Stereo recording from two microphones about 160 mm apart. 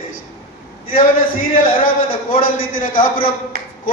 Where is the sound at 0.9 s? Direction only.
60° left (ahead or behind).